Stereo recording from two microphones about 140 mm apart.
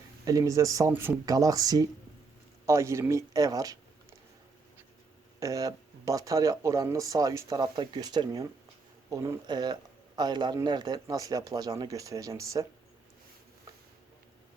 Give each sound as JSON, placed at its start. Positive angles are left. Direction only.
{"t": 0.3, "sound": "speech", "side_deg": -25}
{"t": 1.2, "sound": "speech", "side_deg": -25}
{"t": 5.4, "sound": "speech", "side_deg": -25}
{"t": 9.0, "sound": "speech", "side_deg": -20}